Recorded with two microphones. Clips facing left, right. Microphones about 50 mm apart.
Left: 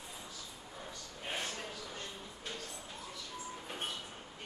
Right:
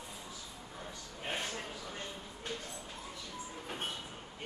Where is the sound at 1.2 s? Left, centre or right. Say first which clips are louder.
Right 1 dB; right.